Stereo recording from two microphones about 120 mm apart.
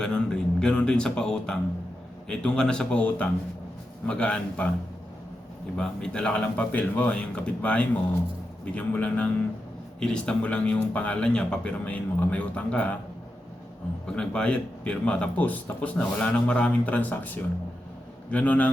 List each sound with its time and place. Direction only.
0.0 s speech: 5° left (ahead or behind)
5.7 s speech: 5° left (ahead or behind)
14.1 s speech: 5° left (ahead or behind)